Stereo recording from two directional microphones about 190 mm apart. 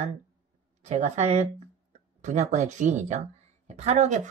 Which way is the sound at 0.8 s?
35° right (ahead or behind).